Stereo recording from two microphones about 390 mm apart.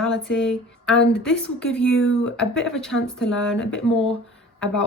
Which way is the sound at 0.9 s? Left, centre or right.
Left.